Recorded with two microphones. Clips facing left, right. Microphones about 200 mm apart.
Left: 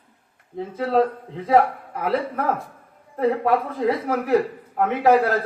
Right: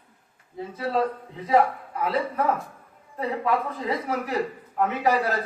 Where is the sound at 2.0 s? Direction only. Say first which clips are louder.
Left 2 dB; 55° left (ahead or behind).